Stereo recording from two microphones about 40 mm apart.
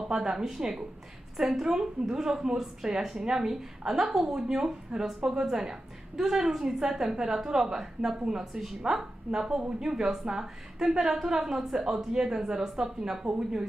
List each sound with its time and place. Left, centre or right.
0.1 s speech: centre